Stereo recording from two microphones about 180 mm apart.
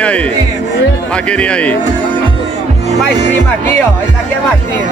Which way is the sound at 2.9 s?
40° right (ahead or behind).